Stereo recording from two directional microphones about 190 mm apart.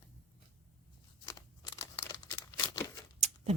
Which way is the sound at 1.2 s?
20° left (ahead or behind).